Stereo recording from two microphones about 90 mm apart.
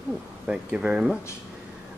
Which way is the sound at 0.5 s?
10° right (ahead or behind).